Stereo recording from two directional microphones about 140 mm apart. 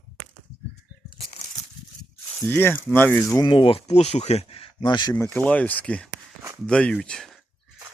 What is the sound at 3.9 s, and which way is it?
Speech, 50° left (ahead or behind).